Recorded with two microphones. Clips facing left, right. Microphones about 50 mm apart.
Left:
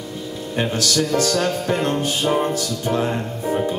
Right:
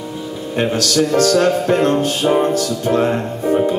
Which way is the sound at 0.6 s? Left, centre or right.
Centre.